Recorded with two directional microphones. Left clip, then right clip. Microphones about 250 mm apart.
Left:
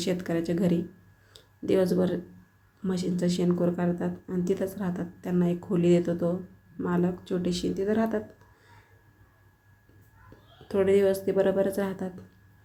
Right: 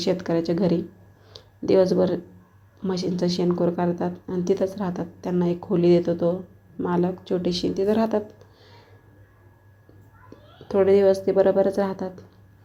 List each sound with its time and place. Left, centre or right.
0.0 s speech: centre
10.2 s a woman's voice: centre